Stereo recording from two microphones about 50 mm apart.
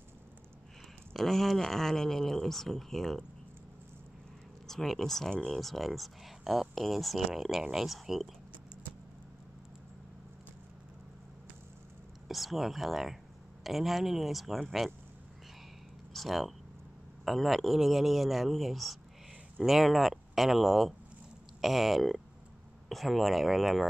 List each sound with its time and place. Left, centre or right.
1.1 s speech: centre
4.6 s speech: centre
5.3 s speech: centre
5.6 s speech: centre
12.3 s speech: centre
16.1 s speech: centre